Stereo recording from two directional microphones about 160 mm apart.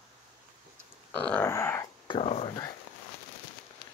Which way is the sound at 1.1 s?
10° left (ahead or behind).